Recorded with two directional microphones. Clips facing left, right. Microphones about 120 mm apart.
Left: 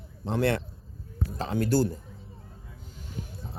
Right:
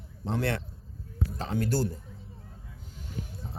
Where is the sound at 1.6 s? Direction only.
70° left (ahead or behind).